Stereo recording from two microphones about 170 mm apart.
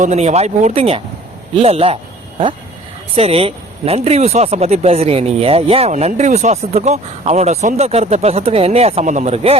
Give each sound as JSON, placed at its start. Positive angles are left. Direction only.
{"t": 0.0, "sound": "speech", "side_deg": -40}
{"t": 3.2, "sound": "speech", "side_deg": -35}